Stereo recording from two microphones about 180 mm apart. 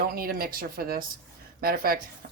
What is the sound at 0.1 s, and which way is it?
Speech, 55° right (ahead or behind).